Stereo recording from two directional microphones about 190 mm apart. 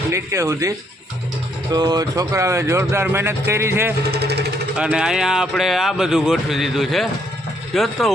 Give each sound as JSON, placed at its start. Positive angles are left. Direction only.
{"t": 0.1, "sound": "speech", "side_deg": -15}
{"t": 1.7, "sound": "speech", "side_deg": -20}
{"t": 4.1, "sound": "speech", "side_deg": -60}
{"t": 4.8, "sound": "speech", "side_deg": -5}